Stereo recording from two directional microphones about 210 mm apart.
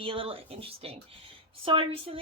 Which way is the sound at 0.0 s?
25° right (ahead or behind).